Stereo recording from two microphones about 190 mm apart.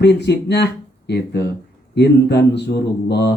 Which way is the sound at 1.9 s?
60° left (ahead or behind).